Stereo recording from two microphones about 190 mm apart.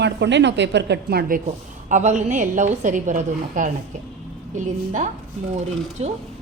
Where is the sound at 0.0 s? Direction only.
65° right (ahead or behind).